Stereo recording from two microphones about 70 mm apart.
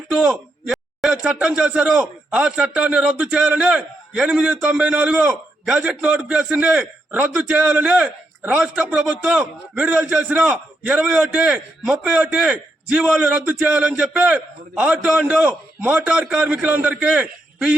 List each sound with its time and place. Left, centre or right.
0.1 s a man's voice: centre